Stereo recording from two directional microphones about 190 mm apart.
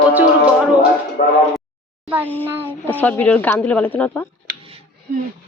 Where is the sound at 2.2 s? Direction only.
10° left (ahead or behind).